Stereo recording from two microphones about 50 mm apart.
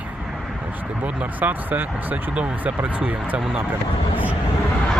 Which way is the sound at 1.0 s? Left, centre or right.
Right.